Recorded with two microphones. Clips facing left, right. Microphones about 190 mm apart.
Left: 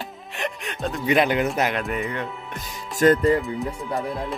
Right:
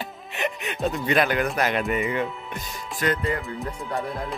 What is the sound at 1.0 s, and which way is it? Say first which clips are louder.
Speech: left 3 dB; 20° left (ahead or behind).